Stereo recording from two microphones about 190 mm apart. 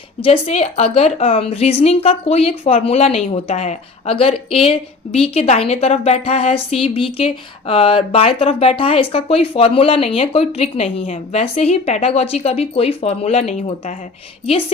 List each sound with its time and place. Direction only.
0.2 s speech: 35° left (ahead or behind)